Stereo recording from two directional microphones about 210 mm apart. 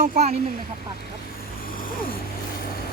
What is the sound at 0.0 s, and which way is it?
Speech, 35° right (ahead or behind).